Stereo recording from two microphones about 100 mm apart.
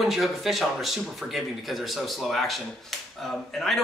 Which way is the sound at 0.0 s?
Centre (ahead or behind).